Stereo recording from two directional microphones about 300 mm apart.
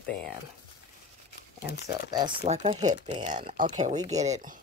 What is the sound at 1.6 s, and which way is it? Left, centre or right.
Speech, centre.